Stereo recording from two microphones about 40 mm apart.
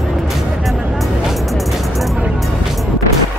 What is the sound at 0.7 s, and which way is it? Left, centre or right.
Music, centre.